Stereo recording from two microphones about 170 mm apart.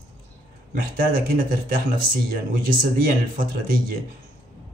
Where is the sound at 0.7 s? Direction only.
60° right (ahead or behind).